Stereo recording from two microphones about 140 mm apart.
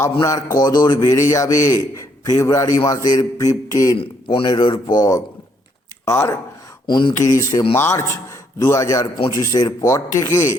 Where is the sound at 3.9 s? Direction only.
40° left (ahead or behind).